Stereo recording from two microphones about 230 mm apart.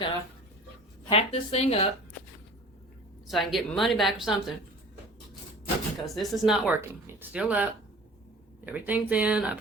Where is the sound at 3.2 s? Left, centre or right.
Centre.